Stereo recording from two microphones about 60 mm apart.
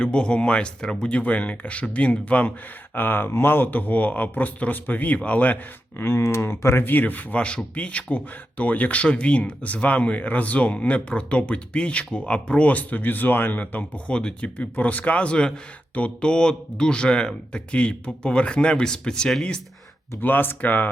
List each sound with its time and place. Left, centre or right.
0.0 s speech: centre
2.9 s speech: left
6.0 s speech: left
6.8 s speech: left; by 14.5 s centre
14.6 s speech: left
20.2 s speech: left